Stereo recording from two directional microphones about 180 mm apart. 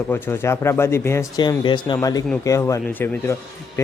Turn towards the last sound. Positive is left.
turn(degrees=15)  # may be behind; listen again after turning